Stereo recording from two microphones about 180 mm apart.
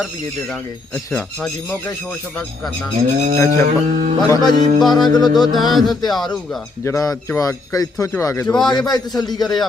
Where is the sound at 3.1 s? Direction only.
40° right (ahead or behind).